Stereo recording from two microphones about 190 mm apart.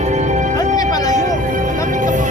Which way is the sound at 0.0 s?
40° right (ahead or behind).